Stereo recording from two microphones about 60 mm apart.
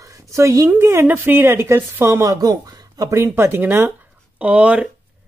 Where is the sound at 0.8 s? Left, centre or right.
Right.